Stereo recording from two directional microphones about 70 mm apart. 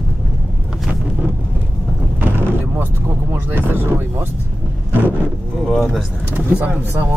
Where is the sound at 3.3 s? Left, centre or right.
Right.